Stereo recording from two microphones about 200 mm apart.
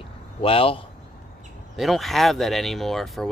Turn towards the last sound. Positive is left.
turn(degrees=0)  # may be behind; listen again after turning